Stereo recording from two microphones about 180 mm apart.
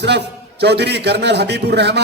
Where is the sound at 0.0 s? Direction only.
70° right (ahead or behind).